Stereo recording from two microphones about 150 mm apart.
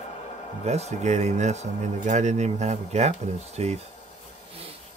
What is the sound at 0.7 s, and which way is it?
Speech, 45° right (ahead or behind).